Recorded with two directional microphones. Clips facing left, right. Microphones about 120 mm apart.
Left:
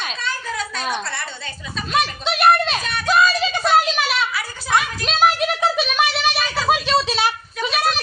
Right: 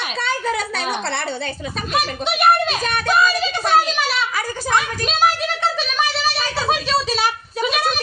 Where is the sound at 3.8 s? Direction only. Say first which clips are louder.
Even; 5° left (ahead or behind).